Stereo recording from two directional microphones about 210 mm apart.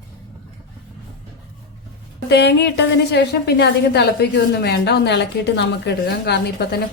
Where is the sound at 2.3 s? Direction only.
55° left (ahead or behind).